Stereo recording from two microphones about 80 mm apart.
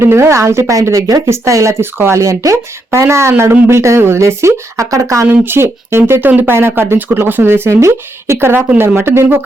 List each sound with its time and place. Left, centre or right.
0.0 s speech: right
5.3 s speech: right